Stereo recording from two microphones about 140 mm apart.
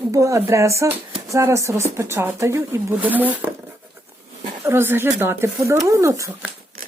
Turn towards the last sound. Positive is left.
turn(degrees=-20)  # may be behind; listen again after turning